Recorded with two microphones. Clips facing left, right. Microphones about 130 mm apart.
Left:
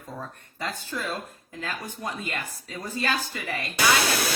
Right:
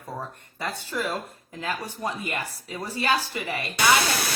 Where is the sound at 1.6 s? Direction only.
20° right (ahead or behind).